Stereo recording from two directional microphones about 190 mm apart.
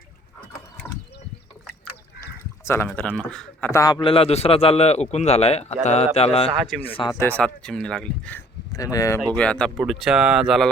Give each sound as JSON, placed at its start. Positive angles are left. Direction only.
{"t": 2.6, "sound": "a man's voice", "side_deg": 10}
{"t": 7.2, "sound": "speech", "side_deg": 10}
{"t": 9.2, "sound": "speech", "side_deg": 5}